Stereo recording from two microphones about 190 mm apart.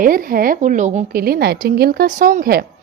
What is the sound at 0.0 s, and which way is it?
A woman's voice, 45° right (ahead or behind).